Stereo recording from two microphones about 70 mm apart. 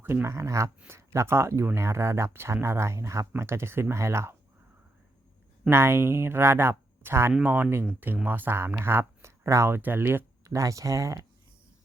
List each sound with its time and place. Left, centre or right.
0.0 s speech: right
5.6 s speech: right
7.4 s speech: right
10.4 s speech: right